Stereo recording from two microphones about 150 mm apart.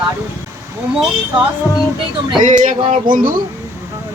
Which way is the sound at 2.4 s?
55° right (ahead or behind).